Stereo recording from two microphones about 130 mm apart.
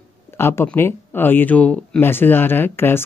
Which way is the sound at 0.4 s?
20° left (ahead or behind).